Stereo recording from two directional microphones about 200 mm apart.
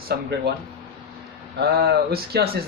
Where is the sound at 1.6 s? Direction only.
50° right (ahead or behind).